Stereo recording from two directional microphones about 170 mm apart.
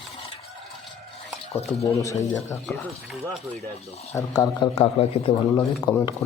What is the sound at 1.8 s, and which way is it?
Speech, 20° left (ahead or behind).